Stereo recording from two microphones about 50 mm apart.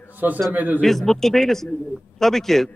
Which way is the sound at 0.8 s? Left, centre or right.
Centre.